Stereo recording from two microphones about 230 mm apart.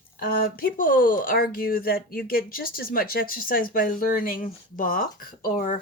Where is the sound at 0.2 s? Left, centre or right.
Left.